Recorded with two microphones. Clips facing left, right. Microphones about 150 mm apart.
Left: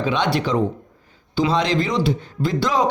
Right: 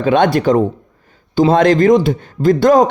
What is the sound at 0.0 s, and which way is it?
A man's voice, 50° right (ahead or behind).